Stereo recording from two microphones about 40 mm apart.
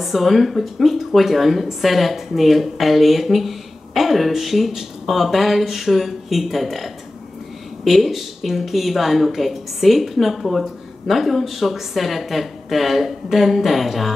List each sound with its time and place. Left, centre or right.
0.0 s speech: centre